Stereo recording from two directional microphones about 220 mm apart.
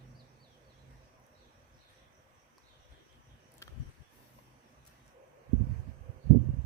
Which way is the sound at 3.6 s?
15° left (ahead or behind).